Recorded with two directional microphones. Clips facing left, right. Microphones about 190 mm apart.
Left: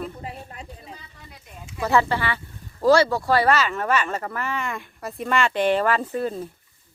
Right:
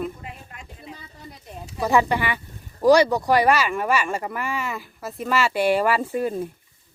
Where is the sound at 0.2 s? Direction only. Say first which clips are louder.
Left 4 dB; 35° left (ahead or behind).